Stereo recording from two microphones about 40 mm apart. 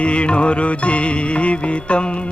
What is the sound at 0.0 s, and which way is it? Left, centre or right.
Music, left.